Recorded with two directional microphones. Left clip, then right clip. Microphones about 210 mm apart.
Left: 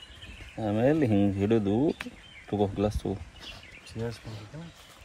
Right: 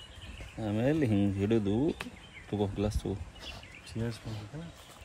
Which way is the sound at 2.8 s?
20° left (ahead or behind).